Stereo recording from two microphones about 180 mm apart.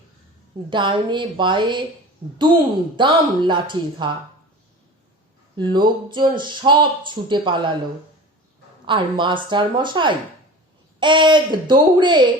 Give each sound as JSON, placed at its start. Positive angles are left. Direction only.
{"t": 0.7, "sound": "speech", "side_deg": -25}
{"t": 2.9, "sound": "speech", "side_deg": -25}
{"t": 5.5, "sound": "speech", "side_deg": -25}
{"t": 8.9, "sound": "speech", "side_deg": -25}